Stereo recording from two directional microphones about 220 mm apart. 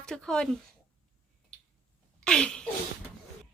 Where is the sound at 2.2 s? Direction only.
5° left (ahead or behind).